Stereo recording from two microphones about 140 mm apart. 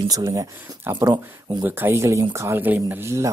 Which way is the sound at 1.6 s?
15° right (ahead or behind).